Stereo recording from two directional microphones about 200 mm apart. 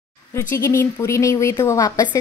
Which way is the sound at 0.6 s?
15° left (ahead or behind).